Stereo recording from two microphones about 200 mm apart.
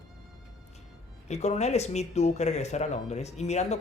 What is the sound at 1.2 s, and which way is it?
Speech, 35° left (ahead or behind).